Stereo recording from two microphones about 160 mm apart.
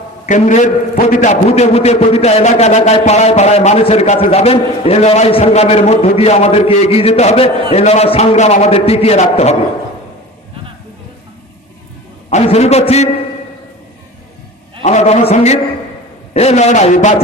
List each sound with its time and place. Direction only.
0.3 s a man's voice: 50° left (ahead or behind)
12.3 s a man's voice: 40° left (ahead or behind)
14.8 s a man's voice: 45° left (ahead or behind)